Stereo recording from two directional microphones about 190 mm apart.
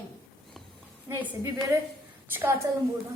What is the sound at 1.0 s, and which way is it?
Speech, 10° right (ahead or behind).